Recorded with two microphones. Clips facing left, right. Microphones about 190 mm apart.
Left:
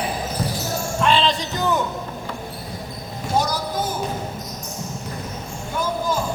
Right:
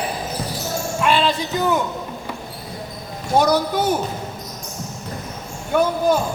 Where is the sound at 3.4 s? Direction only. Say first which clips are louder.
Right 8 dB; 65° right (ahead or behind).